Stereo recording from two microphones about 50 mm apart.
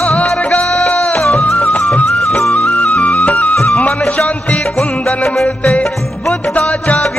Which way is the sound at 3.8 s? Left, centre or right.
Left.